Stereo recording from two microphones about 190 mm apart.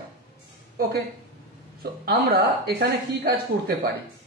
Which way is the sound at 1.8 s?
55° right (ahead or behind).